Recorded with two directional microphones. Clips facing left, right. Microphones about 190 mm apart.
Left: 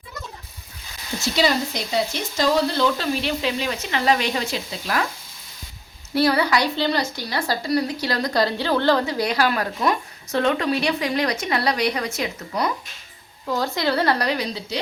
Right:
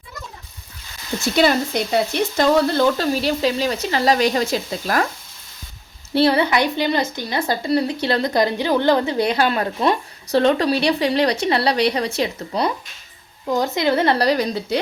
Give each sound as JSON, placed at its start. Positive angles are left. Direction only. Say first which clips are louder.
{"t": 1.2, "sound": "speech", "louder": "right 4 dB", "side_deg": -55}
{"t": 6.1, "sound": "speech", "louder": "right 3 dB", "side_deg": -25}
{"t": 13.5, "sound": "speech", "louder": "right 4 dB", "side_deg": -20}
{"t": 14.3, "sound": "speech", "louder": "right 6 dB", "side_deg": -45}